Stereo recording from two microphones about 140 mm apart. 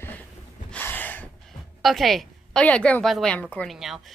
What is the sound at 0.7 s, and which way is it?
Gasp, 15° left (ahead or behind).